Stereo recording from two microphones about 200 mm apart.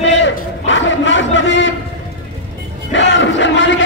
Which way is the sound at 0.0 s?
65° left (ahead or behind).